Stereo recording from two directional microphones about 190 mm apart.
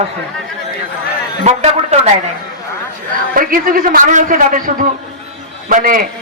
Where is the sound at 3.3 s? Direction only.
50° right (ahead or behind).